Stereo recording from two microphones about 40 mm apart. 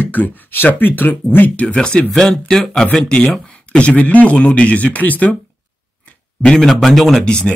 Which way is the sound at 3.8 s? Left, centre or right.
Left.